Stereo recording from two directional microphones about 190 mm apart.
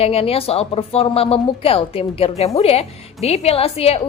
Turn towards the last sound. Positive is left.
turn(degrees=30)  # may be behind; listen again after turning